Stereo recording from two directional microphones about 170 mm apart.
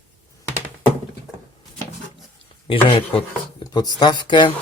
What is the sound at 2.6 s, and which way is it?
Speech, 30° left (ahead or behind).